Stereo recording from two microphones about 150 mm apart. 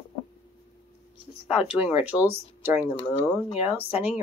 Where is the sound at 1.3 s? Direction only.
35° left (ahead or behind).